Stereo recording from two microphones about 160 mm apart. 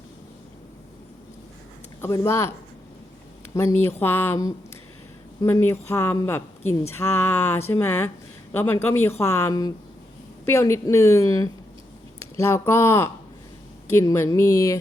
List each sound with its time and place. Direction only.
2.0 s speech: 20° left (ahead or behind)
3.5 s a woman's voice: 15° left (ahead or behind)